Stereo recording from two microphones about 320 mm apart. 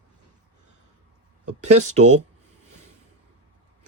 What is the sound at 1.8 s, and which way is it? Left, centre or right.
Speech, right.